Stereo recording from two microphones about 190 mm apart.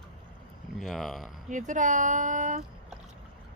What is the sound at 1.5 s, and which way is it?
Speech, 40° right (ahead or behind).